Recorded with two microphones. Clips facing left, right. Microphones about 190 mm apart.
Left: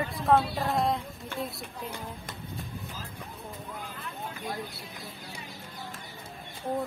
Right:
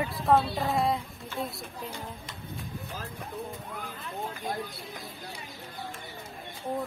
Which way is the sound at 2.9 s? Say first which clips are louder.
Right 5 dB; 65° right (ahead or behind).